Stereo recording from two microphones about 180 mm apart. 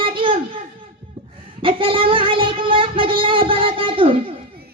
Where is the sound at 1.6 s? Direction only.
30° right (ahead or behind).